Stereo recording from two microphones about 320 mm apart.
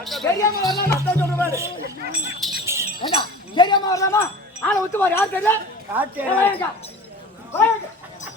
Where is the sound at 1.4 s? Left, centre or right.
Centre.